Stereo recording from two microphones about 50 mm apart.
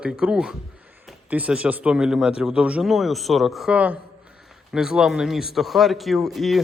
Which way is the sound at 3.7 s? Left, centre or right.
Right.